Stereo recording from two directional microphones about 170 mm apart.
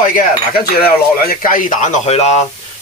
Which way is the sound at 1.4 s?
50° left (ahead or behind).